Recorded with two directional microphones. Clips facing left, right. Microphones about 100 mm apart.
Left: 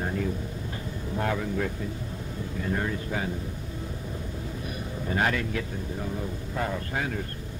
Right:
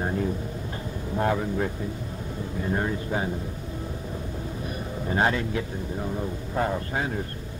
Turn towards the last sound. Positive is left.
turn(degrees=-30)  # may be behind; listen again after turning